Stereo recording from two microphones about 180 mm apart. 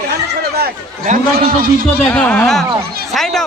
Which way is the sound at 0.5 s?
55° right (ahead or behind).